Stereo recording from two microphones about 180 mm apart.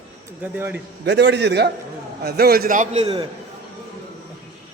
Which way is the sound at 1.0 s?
75° right (ahead or behind).